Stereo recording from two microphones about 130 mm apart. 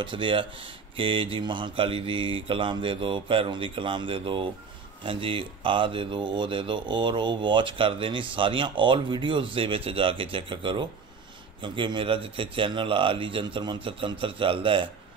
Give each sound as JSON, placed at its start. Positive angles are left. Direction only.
{"t": 0.0, "sound": "speech", "side_deg": -40}